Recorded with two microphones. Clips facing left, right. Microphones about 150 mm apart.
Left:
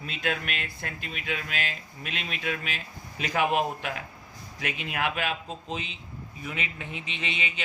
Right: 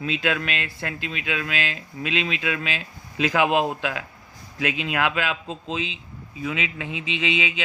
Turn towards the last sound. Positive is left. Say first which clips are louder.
# right 9 dB
turn(degrees=-90)